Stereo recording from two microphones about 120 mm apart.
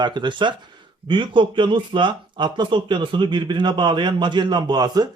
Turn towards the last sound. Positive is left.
turn(degrees=-35)  # may be behind; listen again after turning